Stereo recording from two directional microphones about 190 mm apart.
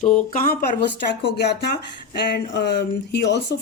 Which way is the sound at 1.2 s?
60° left (ahead or behind).